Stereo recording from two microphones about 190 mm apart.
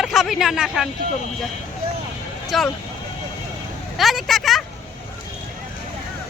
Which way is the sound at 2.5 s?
Centre (ahead or behind).